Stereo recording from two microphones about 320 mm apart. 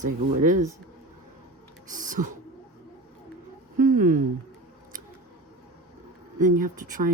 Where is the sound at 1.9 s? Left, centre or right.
Right.